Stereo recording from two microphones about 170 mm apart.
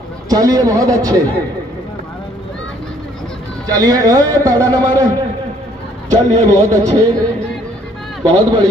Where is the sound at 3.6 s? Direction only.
20° right (ahead or behind).